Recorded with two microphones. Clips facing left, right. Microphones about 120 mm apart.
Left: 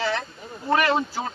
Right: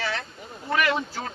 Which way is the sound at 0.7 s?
30° left (ahead or behind).